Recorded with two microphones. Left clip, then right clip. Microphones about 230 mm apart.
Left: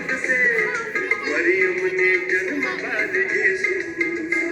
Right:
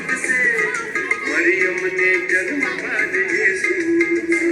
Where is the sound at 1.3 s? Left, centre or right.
Right.